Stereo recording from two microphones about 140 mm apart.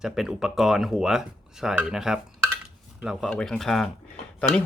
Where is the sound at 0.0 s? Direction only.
Centre (ahead or behind).